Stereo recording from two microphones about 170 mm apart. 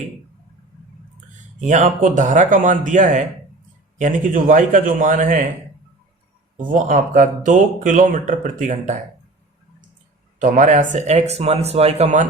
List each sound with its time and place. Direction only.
1.6 s speech: 50° right (ahead or behind)
6.6 s speech: 50° right (ahead or behind)
10.4 s speech: 45° right (ahead or behind)